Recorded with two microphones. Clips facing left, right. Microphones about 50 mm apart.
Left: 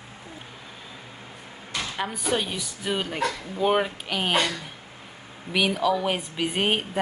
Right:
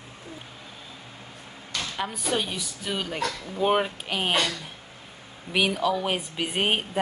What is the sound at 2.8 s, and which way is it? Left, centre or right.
Speech, centre.